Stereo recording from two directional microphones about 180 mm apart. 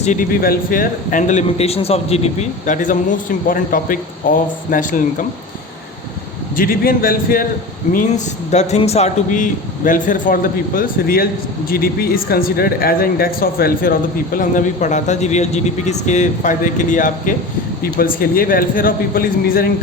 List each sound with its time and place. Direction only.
0.0 s speech: 45° left (ahead or behind)
6.6 s speech: 55° left (ahead or behind)
7.9 s speech: 40° left (ahead or behind); by 13.9 s 55° left (ahead or behind)
14.3 s speech: 45° left (ahead or behind)